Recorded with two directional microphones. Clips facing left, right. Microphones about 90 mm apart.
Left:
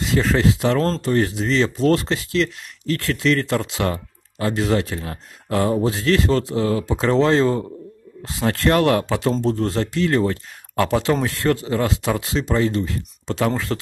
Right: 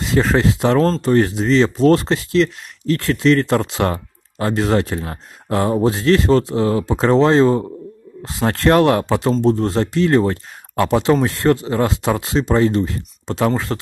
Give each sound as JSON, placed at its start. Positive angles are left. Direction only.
{"t": 0.1, "sound": "speech", "side_deg": -30}
{"t": 10.8, "sound": "speech", "side_deg": -20}